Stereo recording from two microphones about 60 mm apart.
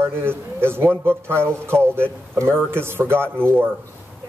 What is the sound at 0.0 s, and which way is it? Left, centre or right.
A man's voice, right.